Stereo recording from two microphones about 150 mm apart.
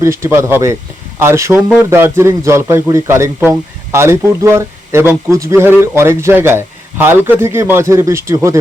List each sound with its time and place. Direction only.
0.0 s a man's voice: 15° right (ahead or behind)